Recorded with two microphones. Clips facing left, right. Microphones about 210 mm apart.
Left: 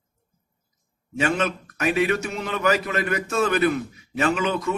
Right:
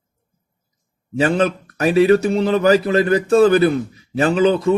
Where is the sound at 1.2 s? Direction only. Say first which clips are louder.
Right 7 dB; 35° right (ahead or behind).